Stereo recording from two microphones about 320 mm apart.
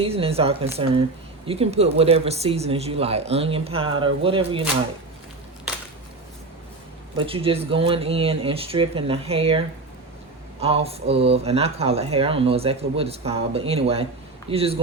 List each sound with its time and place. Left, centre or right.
0.0 s speech: centre
7.2 s speech: centre